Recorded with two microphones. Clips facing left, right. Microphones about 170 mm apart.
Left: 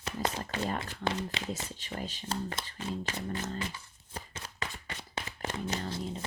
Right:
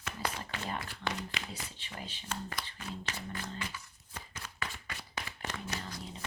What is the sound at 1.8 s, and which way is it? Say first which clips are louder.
Speech: left 6 dB; 40° left (ahead or behind).